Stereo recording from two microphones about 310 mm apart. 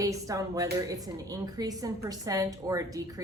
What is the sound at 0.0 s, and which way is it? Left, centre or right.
A woman's voice, centre.